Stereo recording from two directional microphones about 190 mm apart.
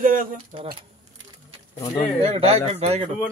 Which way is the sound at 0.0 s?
45° right (ahead or behind).